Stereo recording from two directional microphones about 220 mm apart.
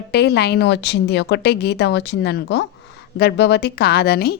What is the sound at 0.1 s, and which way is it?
A woman's voice, 50° left (ahead or behind).